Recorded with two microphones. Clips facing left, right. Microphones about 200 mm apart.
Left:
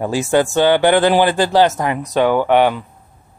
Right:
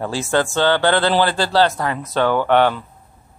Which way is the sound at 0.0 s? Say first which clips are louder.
Left 4 dB; 15° left (ahead or behind).